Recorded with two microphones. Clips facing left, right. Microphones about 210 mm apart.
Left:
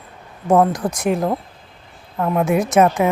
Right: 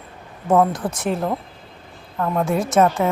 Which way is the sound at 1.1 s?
15° left (ahead or behind).